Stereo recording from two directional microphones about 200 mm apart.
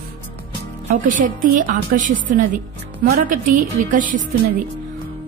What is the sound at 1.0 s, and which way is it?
A woman's voice, 40° right (ahead or behind).